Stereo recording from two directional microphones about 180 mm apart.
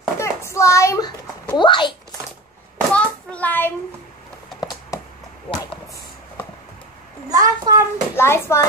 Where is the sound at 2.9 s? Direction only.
5° left (ahead or behind).